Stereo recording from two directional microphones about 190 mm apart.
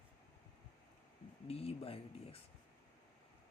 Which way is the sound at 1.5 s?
30° left (ahead or behind).